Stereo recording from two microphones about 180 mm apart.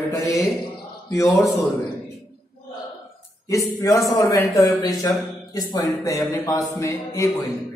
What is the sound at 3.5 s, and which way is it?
Speech, 20° left (ahead or behind).